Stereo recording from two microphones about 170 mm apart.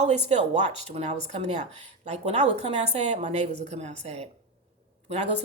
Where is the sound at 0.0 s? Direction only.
40° right (ahead or behind).